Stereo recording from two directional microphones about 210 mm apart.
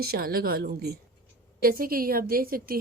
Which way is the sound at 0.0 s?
45° right (ahead or behind).